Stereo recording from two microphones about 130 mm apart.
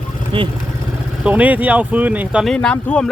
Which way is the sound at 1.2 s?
10° right (ahead or behind).